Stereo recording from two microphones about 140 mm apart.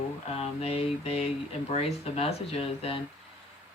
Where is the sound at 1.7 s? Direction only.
45° left (ahead or behind).